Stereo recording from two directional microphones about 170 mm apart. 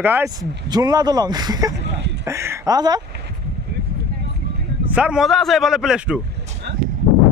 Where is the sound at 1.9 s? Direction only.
90° right.